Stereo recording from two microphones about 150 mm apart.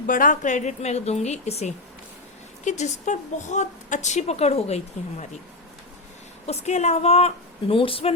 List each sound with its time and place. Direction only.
0.1 s a woman's voice: 60° left (ahead or behind); by 5.2 s 45° left (ahead or behind)
6.4 s a woman's voice: 45° left (ahead or behind)